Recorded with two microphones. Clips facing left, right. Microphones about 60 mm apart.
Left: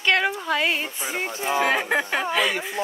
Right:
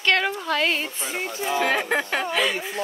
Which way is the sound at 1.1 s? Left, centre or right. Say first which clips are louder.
Left 2 dB; left.